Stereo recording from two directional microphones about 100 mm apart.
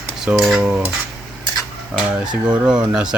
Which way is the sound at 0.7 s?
10° right (ahead or behind).